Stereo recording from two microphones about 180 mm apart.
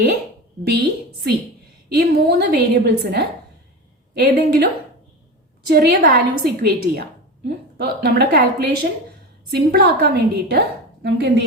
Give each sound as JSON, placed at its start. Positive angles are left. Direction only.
{"t": 0.6, "sound": "a woman's voice", "side_deg": -65}